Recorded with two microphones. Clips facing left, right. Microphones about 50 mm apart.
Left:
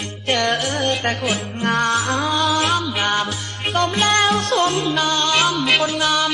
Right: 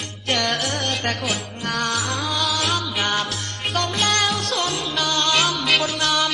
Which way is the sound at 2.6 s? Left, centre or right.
Centre.